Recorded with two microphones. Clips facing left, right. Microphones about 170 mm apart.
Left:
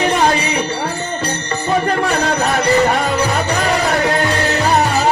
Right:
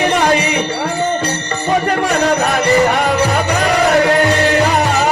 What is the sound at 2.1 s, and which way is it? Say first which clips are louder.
Music: right 2 dB; 35° left (ahead or behind).